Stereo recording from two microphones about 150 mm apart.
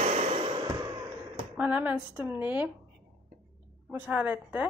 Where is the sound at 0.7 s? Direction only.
25° right (ahead or behind).